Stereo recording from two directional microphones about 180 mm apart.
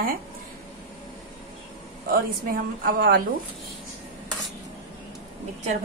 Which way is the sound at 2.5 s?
55° right (ahead or behind).